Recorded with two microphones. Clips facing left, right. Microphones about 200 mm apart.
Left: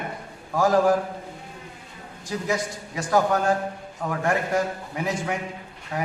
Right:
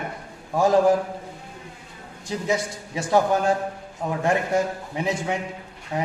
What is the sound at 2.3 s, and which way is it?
A man's voice, 25° right (ahead or behind).